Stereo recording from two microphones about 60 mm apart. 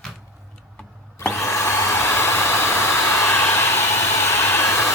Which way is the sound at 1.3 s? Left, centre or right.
Left.